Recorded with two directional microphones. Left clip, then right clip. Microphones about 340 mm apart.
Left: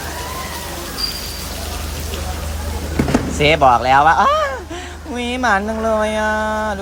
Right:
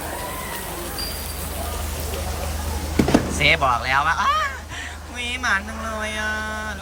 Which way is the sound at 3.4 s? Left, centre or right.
Centre.